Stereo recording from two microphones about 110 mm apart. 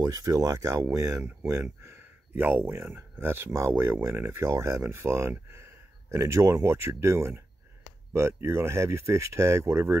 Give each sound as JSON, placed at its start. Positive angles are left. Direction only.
{"t": 0.0, "sound": "speech", "side_deg": -35}